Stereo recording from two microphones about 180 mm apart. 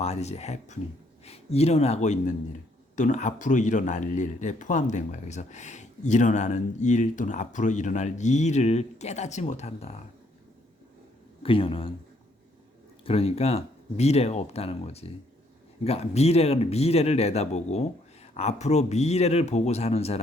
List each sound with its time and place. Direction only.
0.0 s speech: 35° left (ahead or behind)
11.4 s speech: 30° left (ahead or behind)
13.1 s speech: 35° left (ahead or behind)